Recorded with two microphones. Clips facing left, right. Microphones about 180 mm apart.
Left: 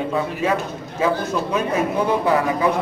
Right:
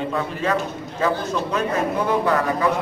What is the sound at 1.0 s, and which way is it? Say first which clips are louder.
Speech: left 2 dB; 10° left (ahead or behind).